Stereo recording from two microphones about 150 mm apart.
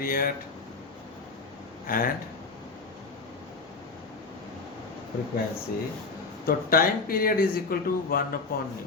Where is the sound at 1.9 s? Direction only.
75° left (ahead or behind).